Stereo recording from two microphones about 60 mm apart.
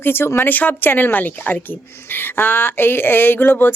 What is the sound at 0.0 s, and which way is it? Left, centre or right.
Speech, left.